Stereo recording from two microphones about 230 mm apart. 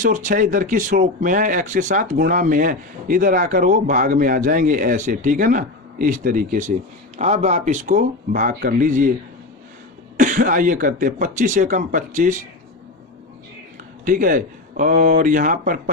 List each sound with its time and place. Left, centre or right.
0.0 s speech: right
10.2 s speech: right
14.0 s speech: right